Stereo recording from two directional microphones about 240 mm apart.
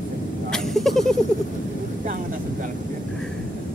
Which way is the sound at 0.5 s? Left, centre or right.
Centre.